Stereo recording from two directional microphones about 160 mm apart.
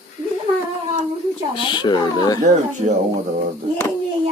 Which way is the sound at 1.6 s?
30° left (ahead or behind).